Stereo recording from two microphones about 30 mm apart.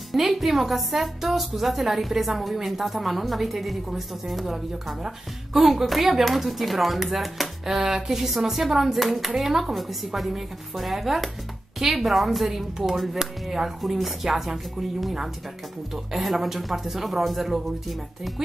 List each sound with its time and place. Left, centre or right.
0.1 s a woman's voice: centre
7.7 s a woman's voice: centre
12.7 s a woman's voice: centre